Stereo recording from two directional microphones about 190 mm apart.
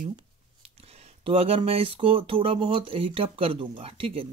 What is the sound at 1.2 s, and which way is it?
Speech, 30° right (ahead or behind).